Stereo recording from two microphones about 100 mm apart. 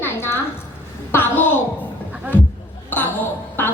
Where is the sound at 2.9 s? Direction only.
20° left (ahead or behind).